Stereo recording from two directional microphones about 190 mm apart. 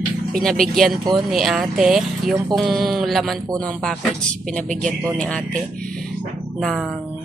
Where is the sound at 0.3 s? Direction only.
5° left (ahead or behind).